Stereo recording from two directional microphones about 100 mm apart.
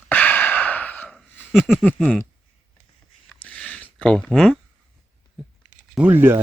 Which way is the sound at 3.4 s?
10° left (ahead or behind).